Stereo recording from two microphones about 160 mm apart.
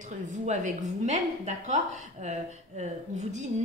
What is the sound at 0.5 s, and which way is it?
A woman's voice, 50° right (ahead or behind).